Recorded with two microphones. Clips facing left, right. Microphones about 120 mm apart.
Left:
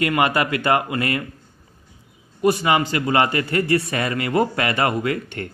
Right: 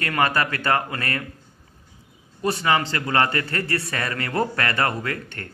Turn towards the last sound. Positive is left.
turn(degrees=20)  # may be behind; listen again after turning